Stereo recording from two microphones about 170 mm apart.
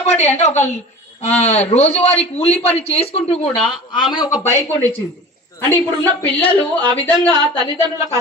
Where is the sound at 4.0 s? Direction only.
25° left (ahead or behind).